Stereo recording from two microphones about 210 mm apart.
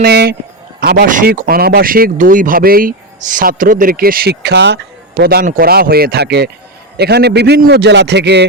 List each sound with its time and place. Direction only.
0.0 s speech: 50° right (ahead or behind)